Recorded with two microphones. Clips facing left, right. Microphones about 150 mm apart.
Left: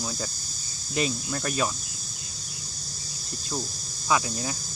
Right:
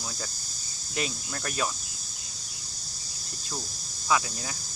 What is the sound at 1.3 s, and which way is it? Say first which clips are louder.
Speech: left 2 dB; 10° left (ahead or behind).